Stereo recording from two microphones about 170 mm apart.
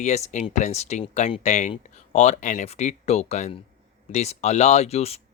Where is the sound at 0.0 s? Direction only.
40° left (ahead or behind).